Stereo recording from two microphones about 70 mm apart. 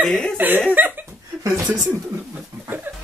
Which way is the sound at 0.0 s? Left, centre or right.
Centre.